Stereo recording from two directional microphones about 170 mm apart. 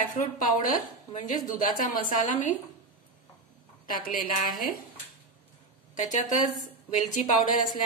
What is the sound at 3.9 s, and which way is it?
Speech, 55° left (ahead or behind).